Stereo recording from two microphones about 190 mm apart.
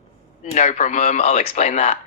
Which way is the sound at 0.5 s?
40° left (ahead or behind).